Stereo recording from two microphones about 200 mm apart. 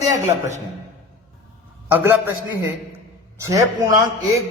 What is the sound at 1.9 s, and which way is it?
Speech, 10° right (ahead or behind).